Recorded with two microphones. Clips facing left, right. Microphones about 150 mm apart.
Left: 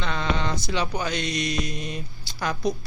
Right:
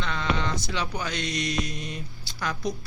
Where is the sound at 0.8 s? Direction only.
15° left (ahead or behind).